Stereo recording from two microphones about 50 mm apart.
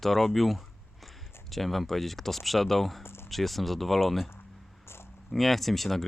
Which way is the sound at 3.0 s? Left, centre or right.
Left.